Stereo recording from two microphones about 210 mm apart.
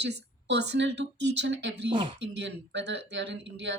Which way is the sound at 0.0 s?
55° right (ahead or behind).